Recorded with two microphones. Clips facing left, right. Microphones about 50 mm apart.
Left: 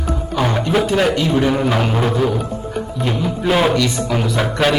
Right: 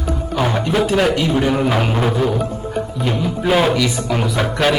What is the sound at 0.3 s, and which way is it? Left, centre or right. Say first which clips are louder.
Speech: even; centre.